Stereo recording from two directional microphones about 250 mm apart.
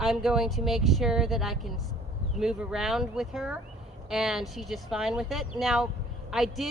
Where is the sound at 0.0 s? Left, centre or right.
Centre.